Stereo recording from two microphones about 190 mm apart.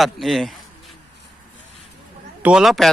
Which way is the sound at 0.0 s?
Centre (ahead or behind).